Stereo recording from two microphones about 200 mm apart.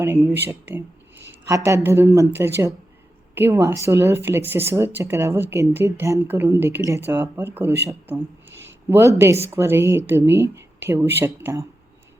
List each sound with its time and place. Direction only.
0.0 s speech: 10° right (ahead or behind)
3.3 s speech: 15° right (ahead or behind)
8.4 s a sound: 65° right (ahead or behind)
8.9 s speech: 15° right (ahead or behind)